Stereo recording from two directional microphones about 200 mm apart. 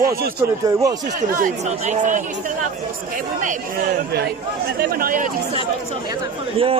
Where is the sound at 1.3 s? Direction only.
40° right (ahead or behind).